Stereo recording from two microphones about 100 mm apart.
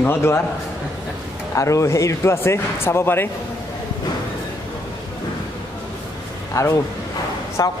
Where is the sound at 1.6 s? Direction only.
30° left (ahead or behind).